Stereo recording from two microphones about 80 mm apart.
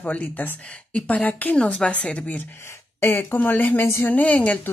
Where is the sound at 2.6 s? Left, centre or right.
Left.